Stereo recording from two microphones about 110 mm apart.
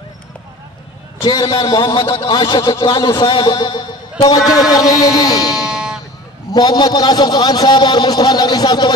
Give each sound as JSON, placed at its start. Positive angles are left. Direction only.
{"t": 1.2, "sound": "a man's voice", "side_deg": 50}
{"t": 5.7, "sound": "guitar", "side_deg": -5}
{"t": 6.5, "sound": "a man's voice", "side_deg": 35}